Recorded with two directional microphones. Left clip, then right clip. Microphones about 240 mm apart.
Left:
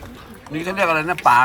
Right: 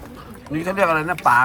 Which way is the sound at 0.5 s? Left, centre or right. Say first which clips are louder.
Even; centre.